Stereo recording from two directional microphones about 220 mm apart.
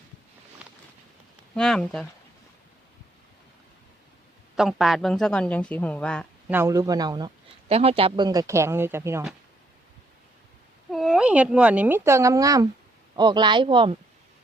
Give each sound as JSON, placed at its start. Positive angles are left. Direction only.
{"t": 1.5, "sound": "a woman's voice", "side_deg": 5}
{"t": 4.5, "sound": "a woman's voice", "side_deg": 0}
{"t": 6.5, "sound": "speech", "side_deg": -10}
{"t": 10.9, "sound": "speech", "side_deg": 0}